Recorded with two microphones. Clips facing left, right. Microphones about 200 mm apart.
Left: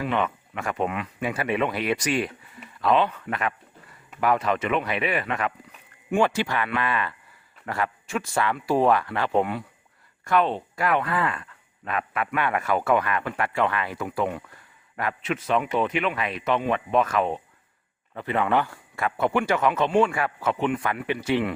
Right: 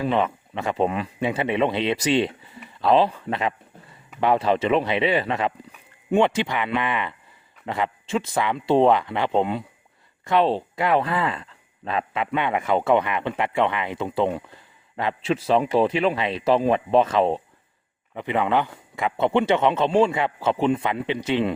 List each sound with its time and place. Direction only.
0.0 s a man's voice: 25° right (ahead or behind)
18.1 s speech: 15° right (ahead or behind)